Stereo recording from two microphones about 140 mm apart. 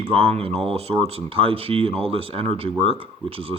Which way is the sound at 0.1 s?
45° right (ahead or behind).